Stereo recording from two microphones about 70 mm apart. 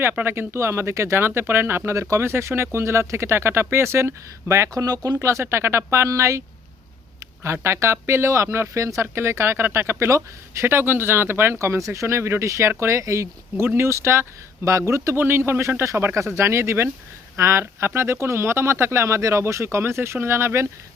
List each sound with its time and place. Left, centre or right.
0.0 s speech: right
2.0 s speech: right
2.2 s speech: right
4.7 s speech: right
5.2 s speech: right
7.4 s speech: right
15.1 s speech: right
15.8 s speech: right